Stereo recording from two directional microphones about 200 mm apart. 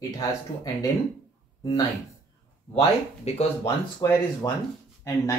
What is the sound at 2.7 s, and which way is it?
Speech, 30° left (ahead or behind).